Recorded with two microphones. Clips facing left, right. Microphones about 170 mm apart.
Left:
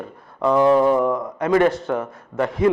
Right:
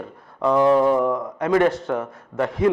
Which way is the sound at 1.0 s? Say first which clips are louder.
Left 1 dB; 30° left (ahead or behind).